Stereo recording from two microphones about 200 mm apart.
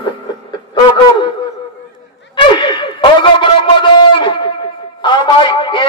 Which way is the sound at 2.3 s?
25° left (ahead or behind).